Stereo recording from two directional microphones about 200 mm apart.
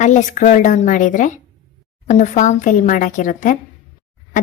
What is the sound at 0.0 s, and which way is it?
Speech, 35° left (ahead or behind).